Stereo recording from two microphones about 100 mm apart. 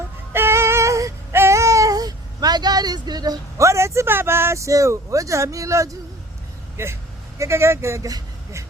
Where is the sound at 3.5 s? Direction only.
30° right (ahead or behind).